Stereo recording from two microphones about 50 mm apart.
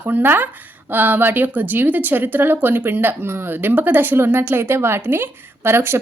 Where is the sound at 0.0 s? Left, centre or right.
Right.